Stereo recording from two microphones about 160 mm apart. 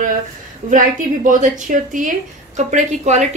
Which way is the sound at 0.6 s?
55° right (ahead or behind).